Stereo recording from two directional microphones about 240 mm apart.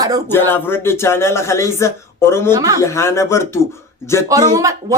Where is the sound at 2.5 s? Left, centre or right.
Centre.